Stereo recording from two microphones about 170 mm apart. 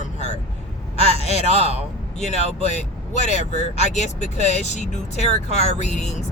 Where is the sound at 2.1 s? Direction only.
45° left (ahead or behind).